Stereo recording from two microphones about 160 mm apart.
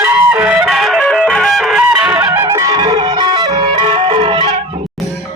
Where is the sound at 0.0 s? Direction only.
15° right (ahead or behind); by 4.5 s 35° right (ahead or behind).